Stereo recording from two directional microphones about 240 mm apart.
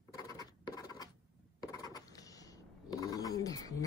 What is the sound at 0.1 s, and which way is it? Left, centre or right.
Scratch, centre.